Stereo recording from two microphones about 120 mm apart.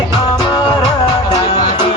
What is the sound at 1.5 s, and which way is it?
Music, 65° left (ahead or behind).